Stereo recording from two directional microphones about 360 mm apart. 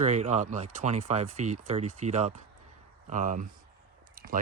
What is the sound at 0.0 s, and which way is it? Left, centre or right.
Speech, centre.